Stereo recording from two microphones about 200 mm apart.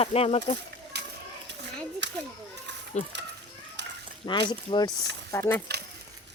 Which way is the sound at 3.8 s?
60° right (ahead or behind).